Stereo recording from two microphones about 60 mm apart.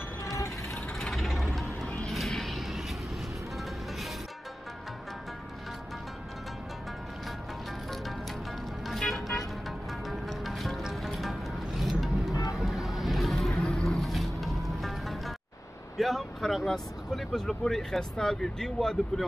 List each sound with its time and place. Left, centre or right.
0.2 s vehicle: left
0.9 s vehicle: centre
8.8 s music: centre
12.3 s music: left
12.5 s music: centre
13.9 s music: centre
16.0 s speech: centre